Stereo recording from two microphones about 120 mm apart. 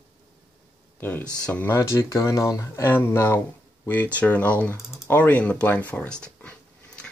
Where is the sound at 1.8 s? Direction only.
25° left (ahead or behind).